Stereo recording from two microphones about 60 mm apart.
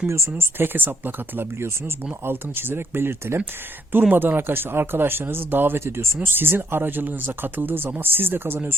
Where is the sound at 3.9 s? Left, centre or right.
Right.